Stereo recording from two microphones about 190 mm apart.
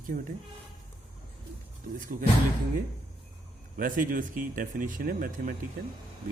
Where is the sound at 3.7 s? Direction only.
45° right (ahead or behind).